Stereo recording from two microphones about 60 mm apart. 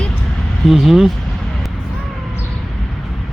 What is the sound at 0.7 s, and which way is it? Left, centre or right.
Speech, centre.